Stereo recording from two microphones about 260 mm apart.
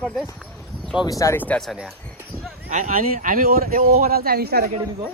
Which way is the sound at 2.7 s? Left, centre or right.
Right.